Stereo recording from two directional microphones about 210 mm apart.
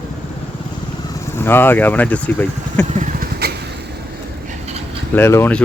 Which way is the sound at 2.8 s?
35° right (ahead or behind).